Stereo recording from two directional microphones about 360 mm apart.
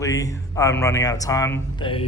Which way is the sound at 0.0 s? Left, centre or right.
Centre.